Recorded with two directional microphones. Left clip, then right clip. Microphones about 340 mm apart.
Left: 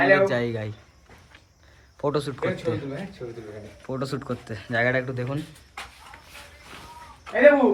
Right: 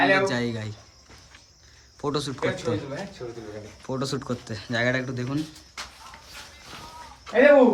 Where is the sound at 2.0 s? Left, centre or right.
Centre.